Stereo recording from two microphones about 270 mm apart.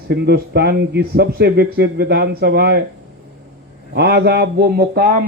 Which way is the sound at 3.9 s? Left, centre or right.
Right.